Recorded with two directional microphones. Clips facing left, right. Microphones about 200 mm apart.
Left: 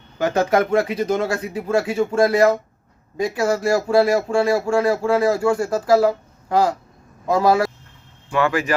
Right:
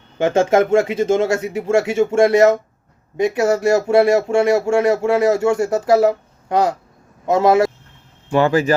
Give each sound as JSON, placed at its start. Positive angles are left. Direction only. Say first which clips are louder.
{"t": 0.2, "sound": "speech", "louder": "right 4 dB", "side_deg": -25}